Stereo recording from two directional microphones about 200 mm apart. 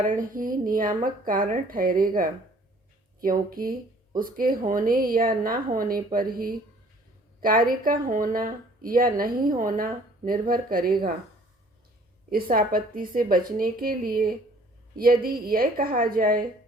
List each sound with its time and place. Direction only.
0.0 s speech: 40° right (ahead or behind)
12.3 s speech: 45° right (ahead or behind)